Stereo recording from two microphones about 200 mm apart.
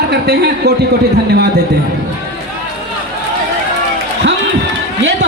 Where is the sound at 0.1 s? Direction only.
55° right (ahead or behind).